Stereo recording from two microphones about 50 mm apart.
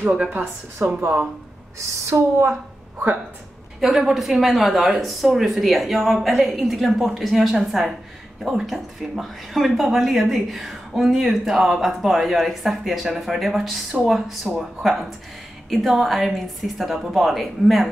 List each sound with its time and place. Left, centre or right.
0.0 s a woman's voice: right
1.8 s speech: right
3.8 s speech: centre